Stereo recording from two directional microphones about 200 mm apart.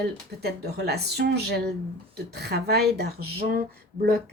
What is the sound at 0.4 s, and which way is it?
Speech, 55° right (ahead or behind).